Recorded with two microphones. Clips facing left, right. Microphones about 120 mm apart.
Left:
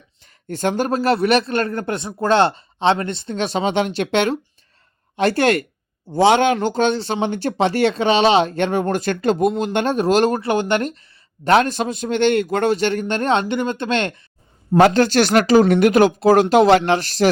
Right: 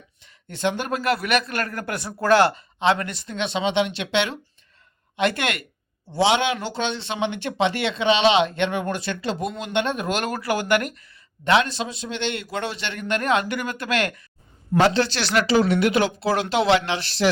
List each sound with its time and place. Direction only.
0.2 s speech: 45° left (ahead or behind)
11.4 s a man's voice: 45° left (ahead or behind); by 14.2 s 25° left (ahead or behind)
14.8 s a man's voice: 50° left (ahead or behind)